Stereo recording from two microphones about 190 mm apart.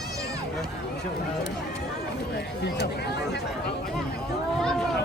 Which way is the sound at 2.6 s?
60° left (ahead or behind).